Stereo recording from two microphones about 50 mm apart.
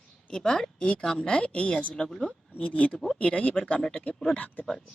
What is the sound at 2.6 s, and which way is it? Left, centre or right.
Speech, left.